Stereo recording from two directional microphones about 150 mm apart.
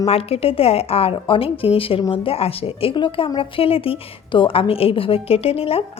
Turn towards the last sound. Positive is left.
turn(degrees=40)  # may be behind; listen again after turning